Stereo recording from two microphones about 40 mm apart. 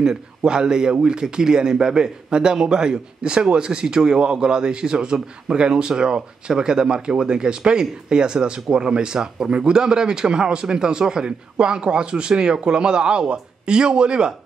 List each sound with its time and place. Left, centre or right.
0.5 s speech: right